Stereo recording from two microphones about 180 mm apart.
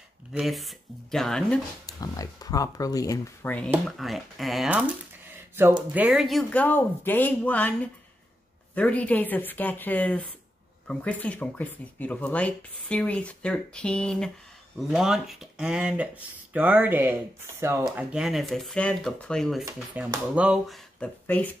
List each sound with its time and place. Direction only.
0.3 s speech: centre (ahead or behind)
1.9 s speech: 20° left (ahead or behind); by 4.8 s 5° right (ahead or behind)
5.9 s speech: 5° right (ahead or behind)
17.8 s speech: 5° right (ahead or behind)
19.6 s speech: 5° right (ahead or behind)